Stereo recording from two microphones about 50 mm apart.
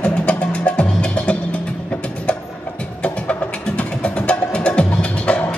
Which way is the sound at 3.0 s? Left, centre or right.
Left.